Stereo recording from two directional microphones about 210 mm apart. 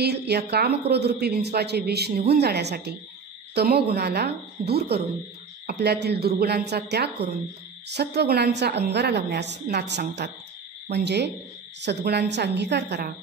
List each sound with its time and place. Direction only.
0.0 s a woman's voice: 50° right (ahead or behind)